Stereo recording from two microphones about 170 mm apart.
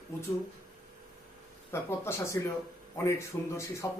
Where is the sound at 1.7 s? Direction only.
15° left (ahead or behind).